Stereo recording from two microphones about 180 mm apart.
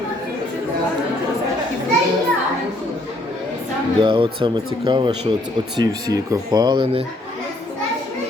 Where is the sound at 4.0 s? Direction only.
25° right (ahead or behind).